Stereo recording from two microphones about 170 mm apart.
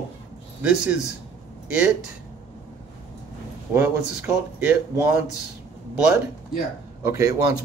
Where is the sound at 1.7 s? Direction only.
5° right (ahead or behind).